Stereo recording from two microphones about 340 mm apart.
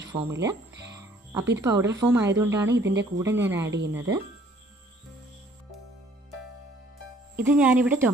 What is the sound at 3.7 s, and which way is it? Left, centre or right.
Speech, right.